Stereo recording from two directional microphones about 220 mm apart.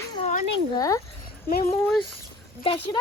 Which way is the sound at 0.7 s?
15° left (ahead or behind).